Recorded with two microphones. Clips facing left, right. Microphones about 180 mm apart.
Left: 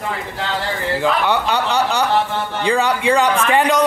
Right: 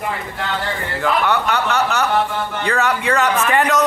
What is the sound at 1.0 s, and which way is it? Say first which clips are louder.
Speech: right 1 dB; 30° left (ahead or behind).